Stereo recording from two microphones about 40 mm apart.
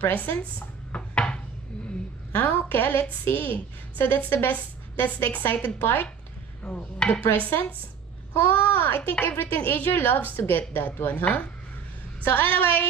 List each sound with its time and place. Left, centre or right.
0.0 s a woman's voice: left
0.9 s a sound: left
2.3 s a woman's voice: left
5.8 s speech: left
6.7 s speech: left
7.3 s a woman's voice: left